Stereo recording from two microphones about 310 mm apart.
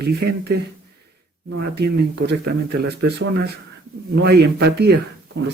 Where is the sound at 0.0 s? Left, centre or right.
Right.